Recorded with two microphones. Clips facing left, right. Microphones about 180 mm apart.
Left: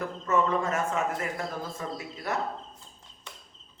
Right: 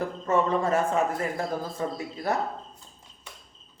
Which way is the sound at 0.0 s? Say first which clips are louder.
Right 2 dB; 30° right (ahead or behind).